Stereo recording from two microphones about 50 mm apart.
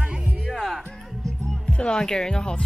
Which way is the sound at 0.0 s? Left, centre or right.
Right.